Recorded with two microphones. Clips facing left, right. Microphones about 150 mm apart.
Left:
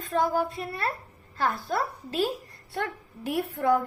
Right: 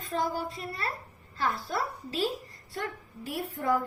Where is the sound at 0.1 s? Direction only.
55° left (ahead or behind).